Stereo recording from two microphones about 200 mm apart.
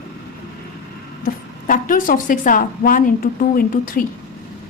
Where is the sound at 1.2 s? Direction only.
45° left (ahead or behind).